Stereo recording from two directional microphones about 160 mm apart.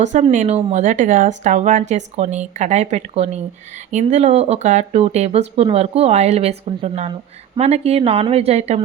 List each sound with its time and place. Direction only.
0.0 s speech: 50° right (ahead or behind)